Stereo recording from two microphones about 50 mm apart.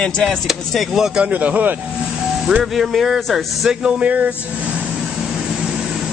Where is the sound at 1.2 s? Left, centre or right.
Right.